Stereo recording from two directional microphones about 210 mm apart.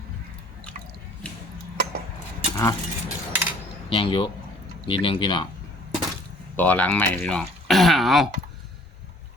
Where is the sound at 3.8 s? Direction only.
25° left (ahead or behind).